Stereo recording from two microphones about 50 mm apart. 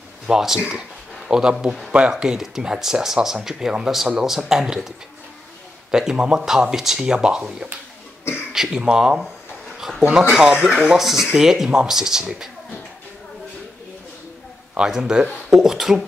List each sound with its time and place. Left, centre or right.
0.3 s speech: centre
9.8 s speech: centre
14.8 s speech: centre